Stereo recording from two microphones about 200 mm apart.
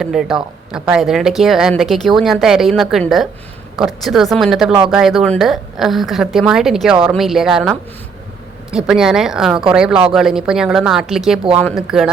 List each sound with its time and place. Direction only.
0.0 s speech: centre (ahead or behind)